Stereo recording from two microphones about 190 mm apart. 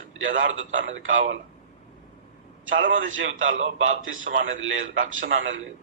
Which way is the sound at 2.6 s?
90° right.